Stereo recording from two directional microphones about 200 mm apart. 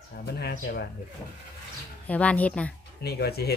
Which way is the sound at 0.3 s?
50° left (ahead or behind).